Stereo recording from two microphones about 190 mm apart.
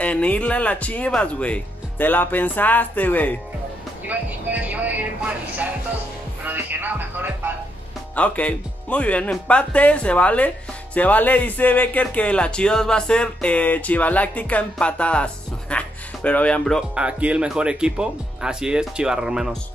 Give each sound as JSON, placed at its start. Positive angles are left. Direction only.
{"t": 0.0, "sound": "speech", "side_deg": 5}
{"t": 4.1, "sound": "speech", "side_deg": -10}
{"t": 8.2, "sound": "speech", "side_deg": 5}